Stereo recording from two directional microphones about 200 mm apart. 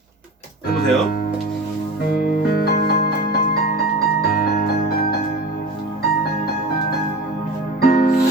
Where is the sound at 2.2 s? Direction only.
50° left (ahead or behind).